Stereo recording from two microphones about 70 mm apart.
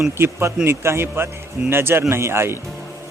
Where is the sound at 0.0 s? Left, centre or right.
Right.